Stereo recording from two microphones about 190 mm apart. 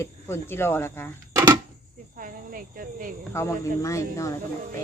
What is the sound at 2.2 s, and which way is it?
Speech, 50° right (ahead or behind).